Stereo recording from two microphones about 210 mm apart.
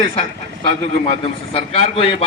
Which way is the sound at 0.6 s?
30° left (ahead or behind).